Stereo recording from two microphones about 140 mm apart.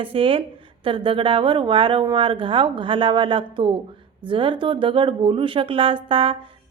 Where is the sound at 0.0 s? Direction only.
40° right (ahead or behind).